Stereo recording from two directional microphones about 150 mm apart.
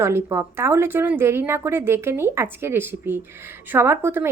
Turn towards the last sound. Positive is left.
turn(degrees=-15)  # may be behind; listen again after turning